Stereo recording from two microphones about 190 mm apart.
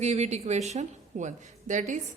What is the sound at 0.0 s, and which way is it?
A woman's voice, 35° right (ahead or behind).